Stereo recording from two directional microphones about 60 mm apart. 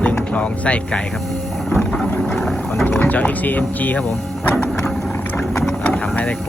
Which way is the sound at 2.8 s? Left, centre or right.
Left.